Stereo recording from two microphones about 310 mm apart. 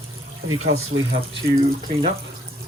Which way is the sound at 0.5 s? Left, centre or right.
Right.